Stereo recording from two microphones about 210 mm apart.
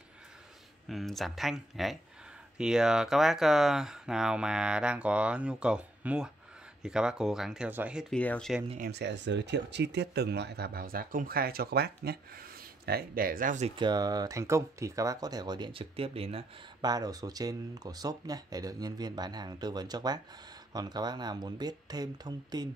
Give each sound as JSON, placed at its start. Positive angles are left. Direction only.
{"t": 0.8, "sound": "speech", "side_deg": 0}
{"t": 8.7, "sound": "speech", "side_deg": -50}
{"t": 13.7, "sound": "speech", "side_deg": -20}